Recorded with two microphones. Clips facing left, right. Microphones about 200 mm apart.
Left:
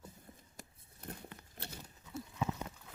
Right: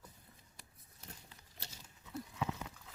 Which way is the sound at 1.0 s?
55° left (ahead or behind).